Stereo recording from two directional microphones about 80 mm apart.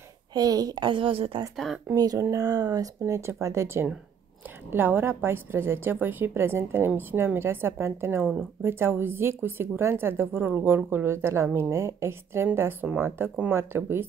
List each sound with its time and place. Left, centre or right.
0.3 s a woman's voice: right
0.8 s a woman's voice: right
1.6 s speech: centre
2.0 s a woman's voice: right
12.8 s speech: centre
13.5 s a woman's voice: right